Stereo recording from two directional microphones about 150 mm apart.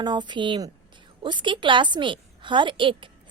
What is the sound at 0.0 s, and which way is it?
A woman's voice, 30° right (ahead or behind).